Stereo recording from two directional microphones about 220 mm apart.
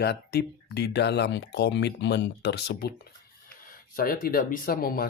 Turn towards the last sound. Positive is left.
turn(degrees=40)  # may be behind; listen again after turning